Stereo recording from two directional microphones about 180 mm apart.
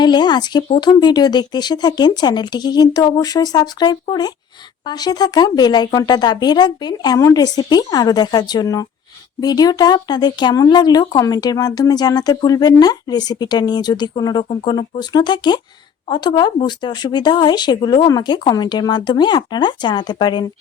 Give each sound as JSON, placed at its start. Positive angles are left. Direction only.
{"t": 0.0, "sound": "speech", "side_deg": 25}